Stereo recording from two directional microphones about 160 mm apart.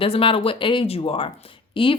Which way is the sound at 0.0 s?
35° left (ahead or behind).